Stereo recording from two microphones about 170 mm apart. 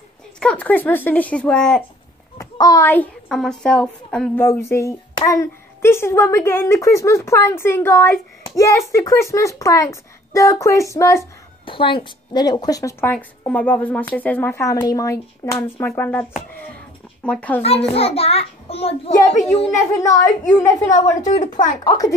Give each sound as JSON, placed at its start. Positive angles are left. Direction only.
{"t": 0.4, "sound": "a child's voice", "side_deg": 5}
{"t": 2.3, "sound": "a child's voice", "side_deg": 20}
{"t": 11.6, "sound": "a child's voice", "side_deg": 30}
{"t": 17.6, "sound": "a child's voice", "side_deg": 35}
{"t": 20.0, "sound": "a child's voice", "side_deg": 20}
{"t": 21.3, "sound": "a child's voice", "side_deg": 45}
{"t": 21.8, "sound": "a child's voice", "side_deg": 20}